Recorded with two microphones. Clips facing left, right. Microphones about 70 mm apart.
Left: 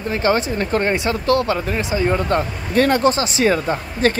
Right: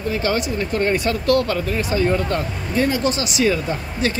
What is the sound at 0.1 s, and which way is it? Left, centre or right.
Speech, left.